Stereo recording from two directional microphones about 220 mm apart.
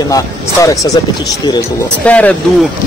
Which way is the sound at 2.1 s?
5° left (ahead or behind).